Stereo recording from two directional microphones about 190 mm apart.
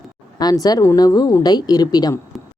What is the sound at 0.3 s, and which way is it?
A woman's voice, 20° left (ahead or behind).